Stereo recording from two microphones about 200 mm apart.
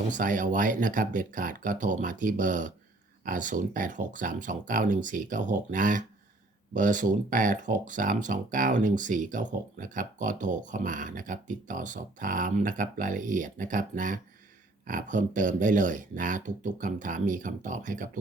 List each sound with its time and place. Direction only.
0.1 s speech: 40° right (ahead or behind)